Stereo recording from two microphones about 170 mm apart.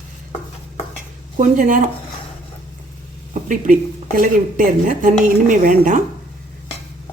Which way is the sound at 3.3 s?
50° right (ahead or behind).